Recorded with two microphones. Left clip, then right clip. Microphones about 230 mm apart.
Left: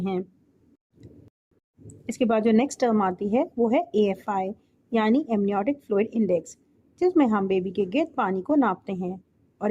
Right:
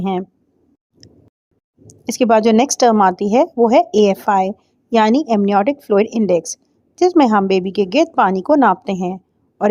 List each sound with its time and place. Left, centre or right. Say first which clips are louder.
0.0 s speech: right 8 dB; right
2.0 s speech: right 10 dB; right